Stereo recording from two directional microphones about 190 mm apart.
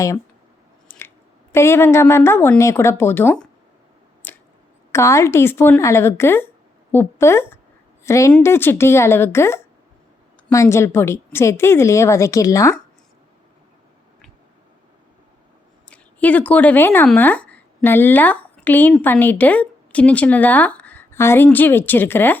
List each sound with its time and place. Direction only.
0.9 s squish: 10° left (ahead or behind)
1.5 s a woman's voice: 15° left (ahead or behind)
4.2 s squish: 10° left (ahead or behind)
4.9 s a woman's voice: 15° left (ahead or behind)
15.9 s speech: 10° left (ahead or behind)